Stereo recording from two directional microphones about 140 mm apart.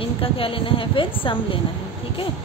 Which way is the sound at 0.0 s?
40° left (ahead or behind).